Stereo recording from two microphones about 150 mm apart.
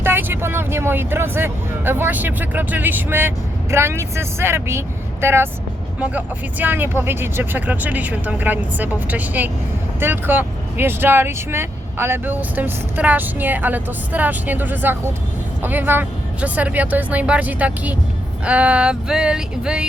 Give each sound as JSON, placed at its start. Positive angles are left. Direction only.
{"t": 0.0, "sound": "speech", "side_deg": -15}